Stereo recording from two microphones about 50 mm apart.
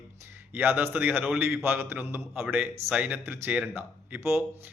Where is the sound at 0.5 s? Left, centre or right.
Right.